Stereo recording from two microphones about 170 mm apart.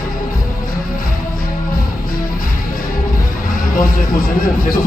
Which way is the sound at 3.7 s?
55° left (ahead or behind).